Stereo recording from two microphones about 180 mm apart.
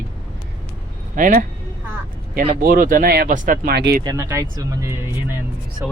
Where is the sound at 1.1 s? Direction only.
50° right (ahead or behind).